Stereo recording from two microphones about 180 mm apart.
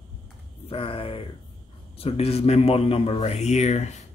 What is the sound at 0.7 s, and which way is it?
Speech, 30° left (ahead or behind).